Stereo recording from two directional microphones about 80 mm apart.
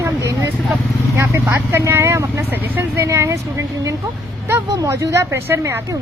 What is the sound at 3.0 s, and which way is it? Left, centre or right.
A woman's voice, right.